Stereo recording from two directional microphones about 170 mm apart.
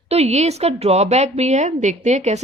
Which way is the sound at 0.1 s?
40° right (ahead or behind).